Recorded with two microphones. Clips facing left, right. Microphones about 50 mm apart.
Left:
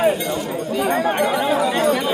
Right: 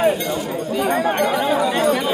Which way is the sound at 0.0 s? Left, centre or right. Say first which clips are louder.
Even; centre.